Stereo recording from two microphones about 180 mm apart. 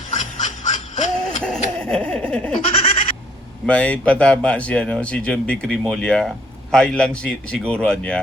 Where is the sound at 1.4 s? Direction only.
5° left (ahead or behind).